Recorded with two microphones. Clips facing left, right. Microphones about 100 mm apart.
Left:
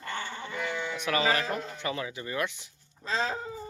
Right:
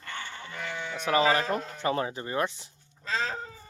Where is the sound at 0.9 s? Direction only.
35° right (ahead or behind).